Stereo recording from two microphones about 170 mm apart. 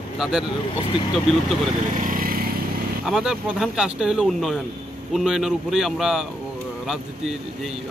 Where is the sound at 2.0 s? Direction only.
55° right (ahead or behind).